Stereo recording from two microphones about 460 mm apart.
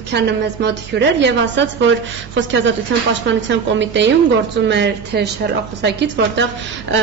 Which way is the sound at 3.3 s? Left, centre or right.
Right.